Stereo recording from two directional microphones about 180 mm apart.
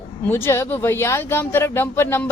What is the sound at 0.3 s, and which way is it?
A woman's voice, 10° left (ahead or behind).